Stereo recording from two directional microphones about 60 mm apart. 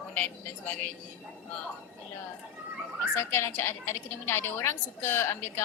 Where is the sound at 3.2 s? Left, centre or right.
Left.